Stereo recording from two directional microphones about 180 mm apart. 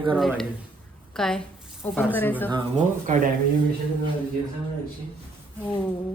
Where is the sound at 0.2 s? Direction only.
Centre (ahead or behind).